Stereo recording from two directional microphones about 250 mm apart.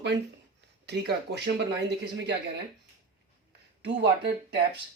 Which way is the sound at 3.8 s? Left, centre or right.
Right.